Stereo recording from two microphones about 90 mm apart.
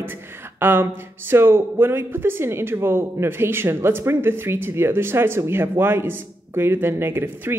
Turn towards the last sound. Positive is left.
turn(degrees=-25)  # may be behind; listen again after turning